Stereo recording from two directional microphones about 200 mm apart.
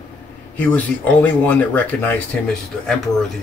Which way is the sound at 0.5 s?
5° left (ahead or behind).